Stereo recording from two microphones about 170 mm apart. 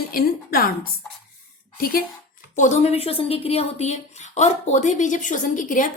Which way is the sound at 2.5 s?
45° left (ahead or behind).